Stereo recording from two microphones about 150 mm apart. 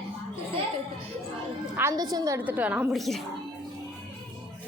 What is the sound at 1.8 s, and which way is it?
Speech, 20° right (ahead or behind).